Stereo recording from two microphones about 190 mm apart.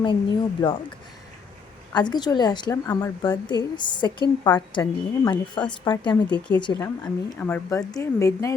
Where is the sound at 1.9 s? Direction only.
25° left (ahead or behind).